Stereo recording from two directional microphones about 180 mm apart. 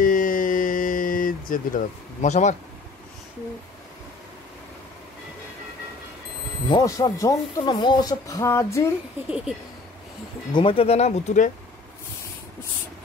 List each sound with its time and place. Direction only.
0.0 s a sound: 50° left (ahead or behind)
6.7 s speech: 20° left (ahead or behind)
10.5 s speech: 30° left (ahead or behind)